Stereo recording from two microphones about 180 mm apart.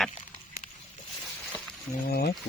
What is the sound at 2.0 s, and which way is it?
Speech, 60° left (ahead or behind).